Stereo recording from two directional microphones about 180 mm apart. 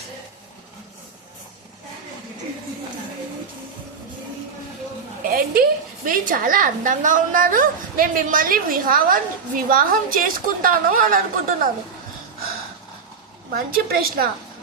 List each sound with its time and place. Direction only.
5.3 s a sound: 55° right (ahead or behind)
6.1 s a woman's voice: 50° right (ahead or behind)
13.5 s a woman's voice: 55° right (ahead or behind)